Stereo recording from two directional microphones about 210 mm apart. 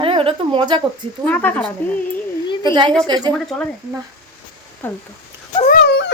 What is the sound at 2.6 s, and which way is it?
Speech, 20° right (ahead or behind).